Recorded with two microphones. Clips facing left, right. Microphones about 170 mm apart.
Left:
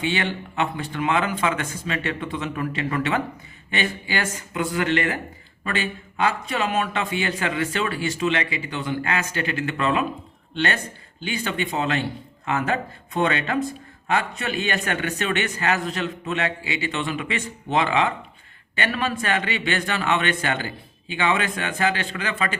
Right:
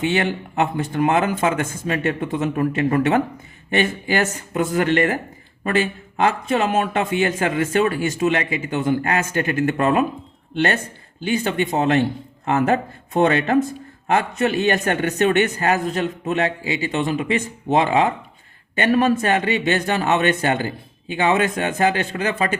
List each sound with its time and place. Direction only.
0.0 s speech: 45° right (ahead or behind)
11.2 s a man's voice: 45° right (ahead or behind)